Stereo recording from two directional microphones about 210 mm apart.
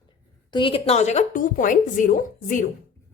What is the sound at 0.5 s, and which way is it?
A woman's voice, 25° left (ahead or behind).